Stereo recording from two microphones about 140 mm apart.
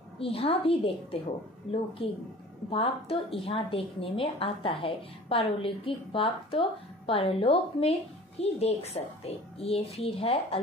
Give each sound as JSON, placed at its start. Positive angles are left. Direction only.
{"t": 0.2, "sound": "a woman's voice", "side_deg": 45}